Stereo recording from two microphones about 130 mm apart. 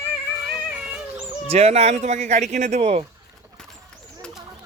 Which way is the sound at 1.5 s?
55° right (ahead or behind).